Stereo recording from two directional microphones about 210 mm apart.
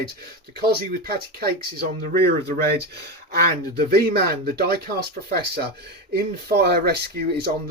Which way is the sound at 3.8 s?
45° right (ahead or behind).